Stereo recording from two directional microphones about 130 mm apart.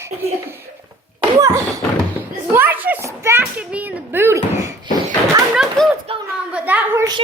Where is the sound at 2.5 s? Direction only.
15° right (ahead or behind).